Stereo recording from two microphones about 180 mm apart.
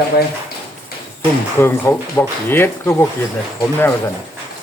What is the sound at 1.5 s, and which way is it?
Speech, 10° left (ahead or behind).